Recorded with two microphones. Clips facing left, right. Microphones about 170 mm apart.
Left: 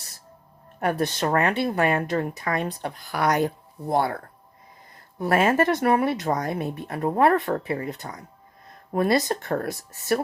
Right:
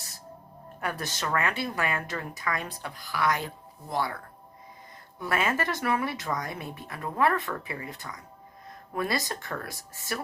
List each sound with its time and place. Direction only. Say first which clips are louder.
0.8 s a woman's voice: left 9 dB; 60° left (ahead or behind); by 3.5 s 45° left (ahead or behind)
3.8 s a woman's voice: left 7 dB; 55° left (ahead or behind)
6.9 s speech: left 11 dB; 40° left (ahead or behind)
7.2 s a woman's voice: left 6 dB; 60° left (ahead or behind)